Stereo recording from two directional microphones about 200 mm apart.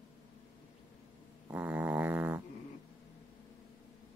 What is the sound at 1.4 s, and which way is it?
Dog, 10° right (ahead or behind).